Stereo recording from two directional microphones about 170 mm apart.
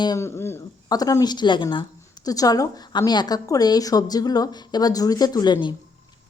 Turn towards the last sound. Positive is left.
turn(degrees=25)  # may be behind; listen again after turning